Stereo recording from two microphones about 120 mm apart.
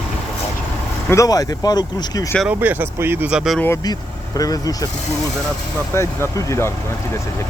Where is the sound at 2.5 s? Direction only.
15° right (ahead or behind).